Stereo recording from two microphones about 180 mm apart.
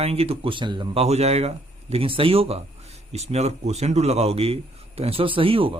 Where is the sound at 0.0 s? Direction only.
35° right (ahead or behind).